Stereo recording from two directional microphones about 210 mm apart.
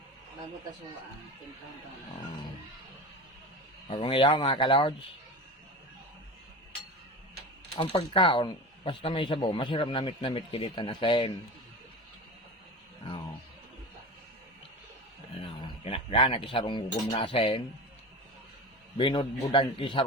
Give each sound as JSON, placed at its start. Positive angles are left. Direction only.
{"t": 3.8, "sound": "speech", "side_deg": 25}
{"t": 7.8, "sound": "speech", "side_deg": 25}
{"t": 13.0, "sound": "speech", "side_deg": 25}
{"t": 15.4, "sound": "a man's voice", "side_deg": 25}
{"t": 18.9, "sound": "speech", "side_deg": 25}